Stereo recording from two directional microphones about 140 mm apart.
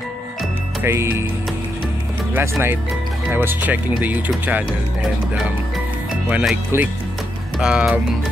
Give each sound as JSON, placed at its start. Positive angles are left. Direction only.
{"t": 0.8, "sound": "speech", "side_deg": -20}
{"t": 2.3, "sound": "speech", "side_deg": -15}
{"t": 6.3, "sound": "speech", "side_deg": -10}